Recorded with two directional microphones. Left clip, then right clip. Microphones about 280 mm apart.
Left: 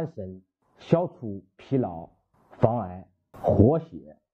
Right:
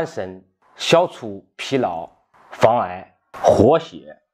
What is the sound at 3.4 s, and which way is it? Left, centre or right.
Speech, right.